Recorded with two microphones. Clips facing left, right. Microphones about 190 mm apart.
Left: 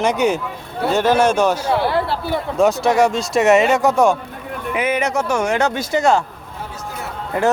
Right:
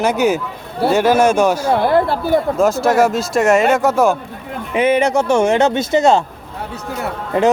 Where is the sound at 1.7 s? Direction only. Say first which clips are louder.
Right 4 dB; 50° right (ahead or behind).